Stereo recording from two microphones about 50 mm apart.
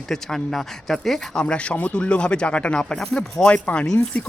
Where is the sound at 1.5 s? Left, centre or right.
Left.